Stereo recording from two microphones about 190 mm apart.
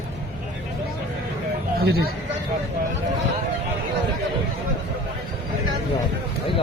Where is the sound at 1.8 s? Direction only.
55° right (ahead or behind).